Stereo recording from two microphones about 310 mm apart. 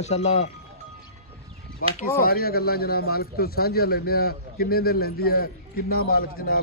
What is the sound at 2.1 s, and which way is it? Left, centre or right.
A man's voice, left.